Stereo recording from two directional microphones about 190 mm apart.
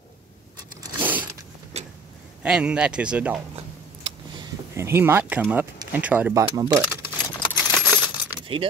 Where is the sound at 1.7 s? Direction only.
35° right (ahead or behind).